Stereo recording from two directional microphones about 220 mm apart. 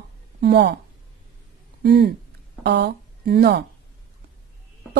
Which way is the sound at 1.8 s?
45° right (ahead or behind).